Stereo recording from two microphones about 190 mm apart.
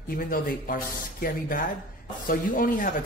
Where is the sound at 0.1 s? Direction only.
50° left (ahead or behind).